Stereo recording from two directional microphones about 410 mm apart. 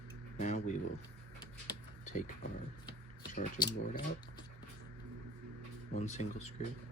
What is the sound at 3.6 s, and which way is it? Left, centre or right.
Speech, centre.